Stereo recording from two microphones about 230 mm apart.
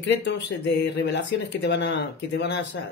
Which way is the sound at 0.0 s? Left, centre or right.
Left.